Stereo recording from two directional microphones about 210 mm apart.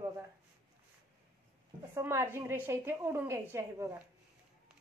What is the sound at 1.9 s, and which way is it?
A woman's voice, 10° right (ahead or behind).